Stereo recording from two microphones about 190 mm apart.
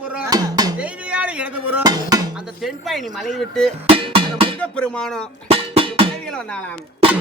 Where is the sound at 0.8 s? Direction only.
5° right (ahead or behind).